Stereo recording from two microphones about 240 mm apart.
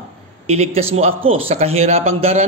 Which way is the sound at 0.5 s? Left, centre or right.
Right.